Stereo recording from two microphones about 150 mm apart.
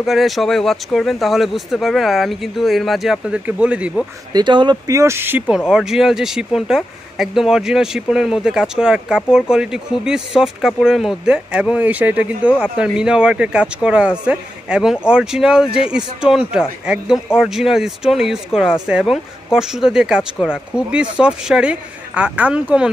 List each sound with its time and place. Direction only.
0.0 s speech: centre (ahead or behind)
4.3 s speech: 30° right (ahead or behind); by 5.6 s 15° right (ahead or behind)
5.6 s speech: 5° right (ahead or behind)